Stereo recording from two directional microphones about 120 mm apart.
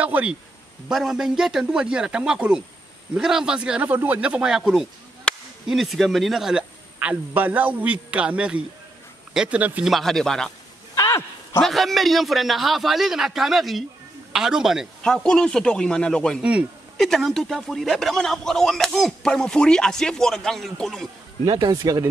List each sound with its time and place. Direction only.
0.0 s speech: 10° right (ahead or behind)
5.3 s a sound: 10° left (ahead or behind)
5.7 s speech: centre (ahead or behind)
9.9 s speech: 5° left (ahead or behind)
11.0 s a sound: 25° left (ahead or behind)
11.6 s speech: centre (ahead or behind)
21.5 s speech: 35° right (ahead or behind)